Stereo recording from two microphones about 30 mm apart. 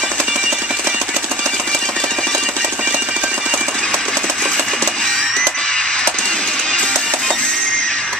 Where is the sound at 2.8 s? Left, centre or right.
Right.